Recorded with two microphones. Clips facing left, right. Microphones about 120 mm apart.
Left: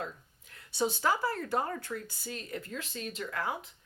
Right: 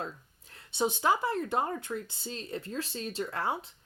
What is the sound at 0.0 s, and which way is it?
Speech, 30° right (ahead or behind).